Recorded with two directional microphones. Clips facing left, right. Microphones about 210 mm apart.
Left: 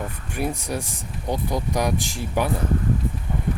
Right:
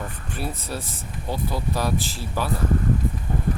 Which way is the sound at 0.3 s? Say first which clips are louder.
Left 5 dB; 15° left (ahead or behind).